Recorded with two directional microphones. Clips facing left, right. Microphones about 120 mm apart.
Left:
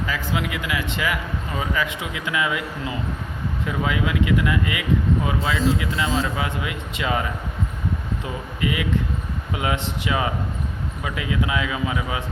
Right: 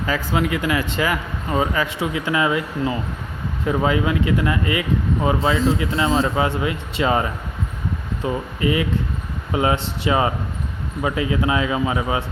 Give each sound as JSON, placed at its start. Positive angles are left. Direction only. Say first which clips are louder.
{"t": 0.1, "sound": "speech", "louder": "right 8 dB", "side_deg": -40}